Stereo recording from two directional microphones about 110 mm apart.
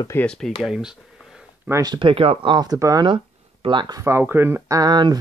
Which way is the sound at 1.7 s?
35° right (ahead or behind).